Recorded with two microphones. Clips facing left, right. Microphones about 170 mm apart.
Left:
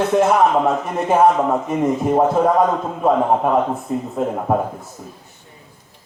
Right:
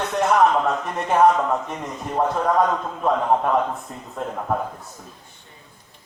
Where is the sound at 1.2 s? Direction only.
20° left (ahead or behind).